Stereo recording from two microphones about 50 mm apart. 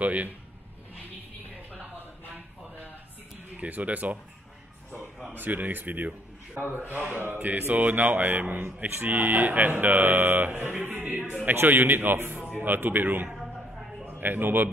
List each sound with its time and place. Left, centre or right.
0.0 s speech: right
2.0 s a sound: right
3.5 s speech: right
5.3 s a man's voice: right
13.3 s a sound: centre
14.0 s a man's voice: right